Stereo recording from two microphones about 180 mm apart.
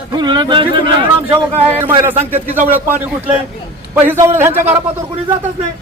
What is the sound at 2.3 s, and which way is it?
Speech, 10° right (ahead or behind).